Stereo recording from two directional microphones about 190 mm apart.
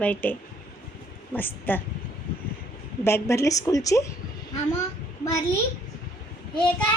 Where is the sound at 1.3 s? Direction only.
10° left (ahead or behind).